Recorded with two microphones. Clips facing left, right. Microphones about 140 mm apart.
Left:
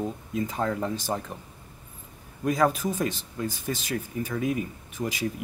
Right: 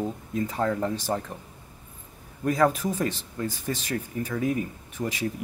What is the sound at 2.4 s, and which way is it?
Speech, 15° left (ahead or behind).